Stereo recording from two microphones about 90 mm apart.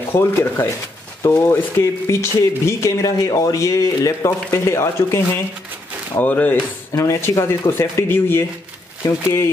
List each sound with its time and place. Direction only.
0.1 s speech: 25° left (ahead or behind)
6.9 s speech: 35° left (ahead or behind)